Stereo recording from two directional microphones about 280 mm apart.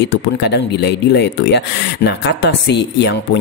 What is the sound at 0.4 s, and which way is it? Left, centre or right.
Speech, left.